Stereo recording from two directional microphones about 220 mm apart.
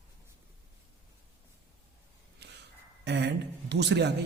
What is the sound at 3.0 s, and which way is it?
A man's voice, 50° right (ahead or behind).